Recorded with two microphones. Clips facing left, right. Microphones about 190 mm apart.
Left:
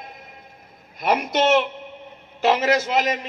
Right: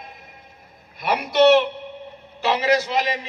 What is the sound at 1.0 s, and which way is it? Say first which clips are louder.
A man's voice: right 3 dB; 45° left (ahead or behind).